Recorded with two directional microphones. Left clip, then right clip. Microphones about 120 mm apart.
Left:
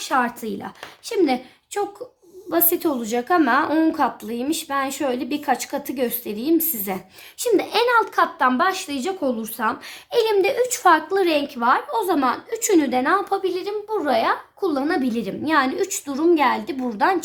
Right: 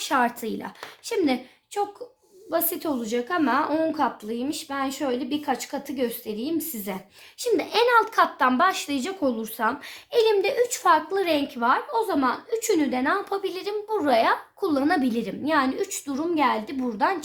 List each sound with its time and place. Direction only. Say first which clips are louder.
0.0 s a woman's voice: left 2 dB; centre (ahead or behind)
1.8 s a woman's voice: left 2 dB; 40° left (ahead or behind)
7.5 s speech: left 2 dB; 15° left (ahead or behind)
10.1 s a woman's voice: left 2 dB; 35° left (ahead or behind)
13.0 s a woman's voice: left 5 dB; 20° left (ahead or behind)
13.3 s speech: left 5 dB; 5° left (ahead or behind)
15.1 s a woman's voice: left 2 dB; 15° left (ahead or behind)
15.4 s a woman's voice: left 4 dB; 35° left (ahead or behind)